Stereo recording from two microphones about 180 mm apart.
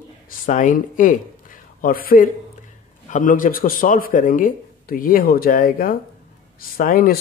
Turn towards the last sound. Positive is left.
turn(degrees=55)  # may be behind; listen again after turning